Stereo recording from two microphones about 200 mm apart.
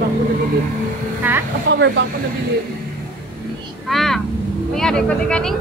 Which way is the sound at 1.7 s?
65° right (ahead or behind).